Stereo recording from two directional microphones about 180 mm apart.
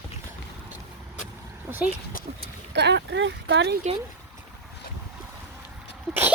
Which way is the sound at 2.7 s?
70° right (ahead or behind).